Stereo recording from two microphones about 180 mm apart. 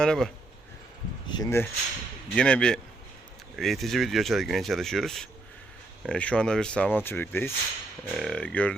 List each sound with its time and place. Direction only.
0.0 s speech: 5° left (ahead or behind)
1.3 s speech: 20° left (ahead or behind)
2.3 s speech: 5° left (ahead or behind)